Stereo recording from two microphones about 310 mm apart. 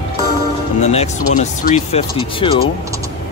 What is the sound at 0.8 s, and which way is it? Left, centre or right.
Speech, left.